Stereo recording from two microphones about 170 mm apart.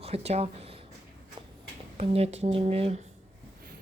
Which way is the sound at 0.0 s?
35° right (ahead or behind).